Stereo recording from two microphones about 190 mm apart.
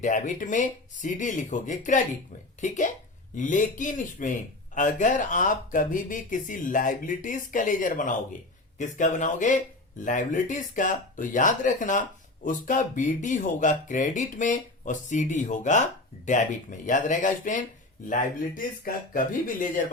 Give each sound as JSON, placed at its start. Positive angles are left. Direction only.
{"t": 0.0, "sound": "speech", "side_deg": 40}